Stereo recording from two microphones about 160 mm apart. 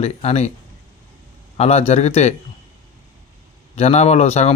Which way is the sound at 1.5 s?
40° left (ahead or behind).